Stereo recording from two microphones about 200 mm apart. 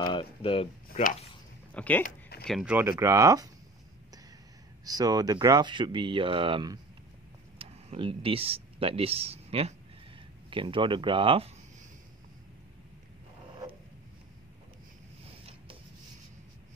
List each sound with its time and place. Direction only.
0.0 s speech: 25° left (ahead or behind)
1.7 s speech: 5° left (ahead or behind)
2.0 s a sound: 50° left (ahead or behind)
2.4 s speech: 5° right (ahead or behind)
4.8 s speech: 20° right (ahead or behind)